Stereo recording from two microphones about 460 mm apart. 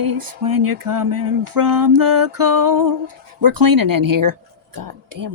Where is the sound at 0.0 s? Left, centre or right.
Right.